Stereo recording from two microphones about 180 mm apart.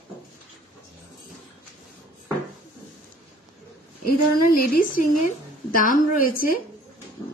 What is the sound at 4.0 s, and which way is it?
A woman's voice, 50° left (ahead or behind).